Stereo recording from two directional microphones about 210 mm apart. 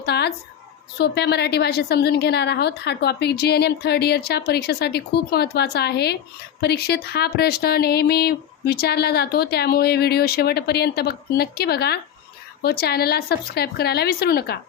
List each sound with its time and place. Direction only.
0.0 s speech: 50° left (ahead or behind)